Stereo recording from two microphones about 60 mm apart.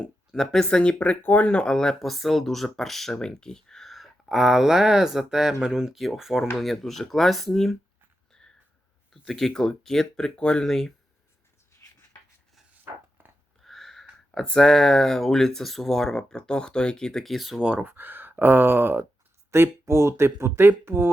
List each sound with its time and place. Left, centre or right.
0.3 s speech: centre
8.3 s a sound: centre
9.2 s speech: centre
12.8 s chopping: right
13.6 s a sound: centre
14.5 s speech: centre
17.7 s speech: right